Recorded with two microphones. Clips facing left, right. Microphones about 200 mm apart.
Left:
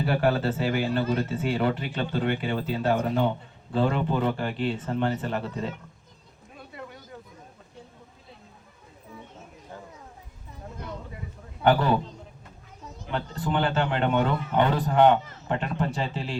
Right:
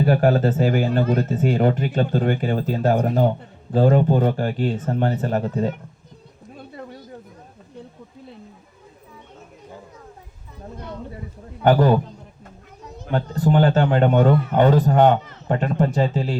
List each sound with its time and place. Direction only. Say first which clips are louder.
0.0 s speech: right 7 dB; 45° right (ahead or behind)
6.7 s a sound: right 4 dB; 35° right (ahead or behind)
11.6 s a man's voice: right 6 dB; 40° right (ahead or behind)
13.1 s speech: right 9 dB; 40° right (ahead or behind)